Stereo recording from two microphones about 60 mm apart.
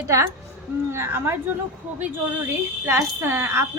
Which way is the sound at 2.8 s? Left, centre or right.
Right.